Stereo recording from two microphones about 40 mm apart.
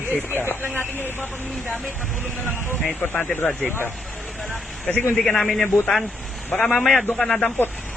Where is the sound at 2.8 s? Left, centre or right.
Left.